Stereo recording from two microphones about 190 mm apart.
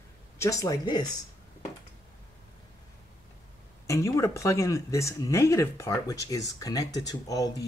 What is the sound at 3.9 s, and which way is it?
Speech, 15° left (ahead or behind).